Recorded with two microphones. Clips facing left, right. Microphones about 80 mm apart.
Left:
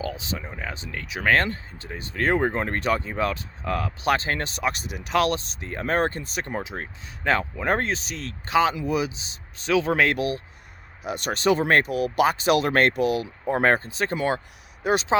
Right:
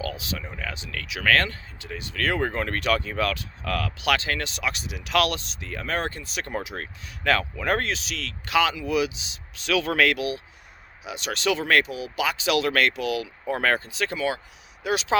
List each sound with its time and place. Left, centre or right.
0.0 s speech: left
5.1 s speech: left
6.4 s speech: left